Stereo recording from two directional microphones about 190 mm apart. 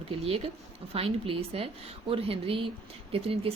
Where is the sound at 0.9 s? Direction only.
30° right (ahead or behind).